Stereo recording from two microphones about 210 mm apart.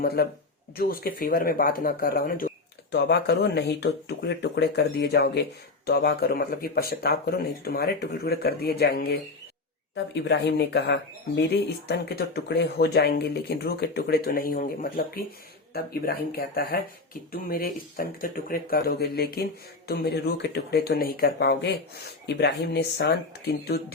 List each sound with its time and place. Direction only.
0.0 s speech: 50° left (ahead or behind)